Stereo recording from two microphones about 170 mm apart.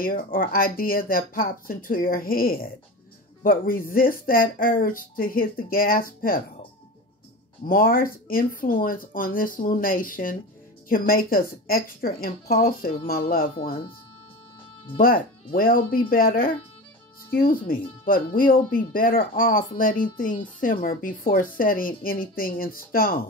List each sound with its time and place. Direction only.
0.0 s a woman's voice: 55° left (ahead or behind)
7.6 s a woman's voice: 55° left (ahead or behind)
15.0 s a woman's voice: 60° left (ahead or behind)